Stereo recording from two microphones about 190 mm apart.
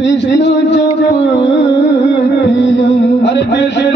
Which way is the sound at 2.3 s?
70° left (ahead or behind).